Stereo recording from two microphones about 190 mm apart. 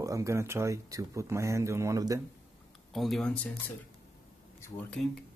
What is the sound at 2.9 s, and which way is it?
Speech, centre (ahead or behind).